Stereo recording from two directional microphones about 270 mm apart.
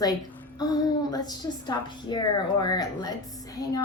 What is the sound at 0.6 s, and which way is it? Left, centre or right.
A woman's voice, centre.